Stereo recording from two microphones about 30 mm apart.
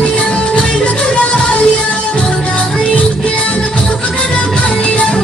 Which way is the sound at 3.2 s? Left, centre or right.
Left.